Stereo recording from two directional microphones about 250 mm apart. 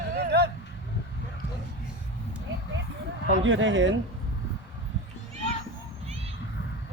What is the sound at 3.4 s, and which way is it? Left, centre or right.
Speech, right.